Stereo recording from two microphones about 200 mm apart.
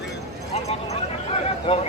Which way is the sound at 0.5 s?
30° left (ahead or behind).